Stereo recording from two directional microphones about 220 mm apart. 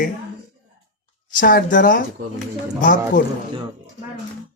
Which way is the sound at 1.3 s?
40° left (ahead or behind).